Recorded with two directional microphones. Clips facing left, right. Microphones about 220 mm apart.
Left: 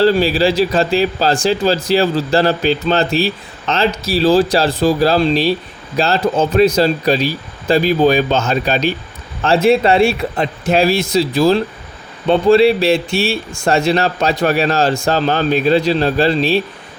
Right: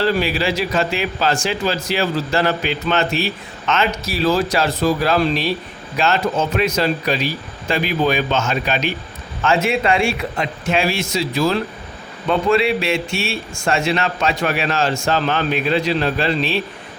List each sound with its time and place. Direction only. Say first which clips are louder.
0.0 s speech: left 6 dB; 35° left (ahead or behind)